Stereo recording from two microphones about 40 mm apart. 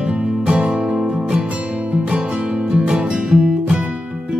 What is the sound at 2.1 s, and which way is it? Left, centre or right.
Music, right.